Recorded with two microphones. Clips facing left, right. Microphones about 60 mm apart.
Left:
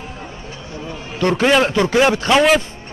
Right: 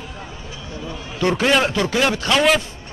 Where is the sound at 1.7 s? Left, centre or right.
Left.